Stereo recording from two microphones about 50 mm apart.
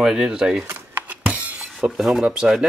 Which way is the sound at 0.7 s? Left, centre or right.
Right.